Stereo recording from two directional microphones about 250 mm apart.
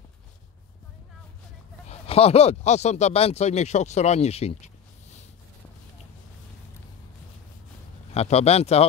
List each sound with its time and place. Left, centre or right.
1.9 s speech: left
8.1 s speech: left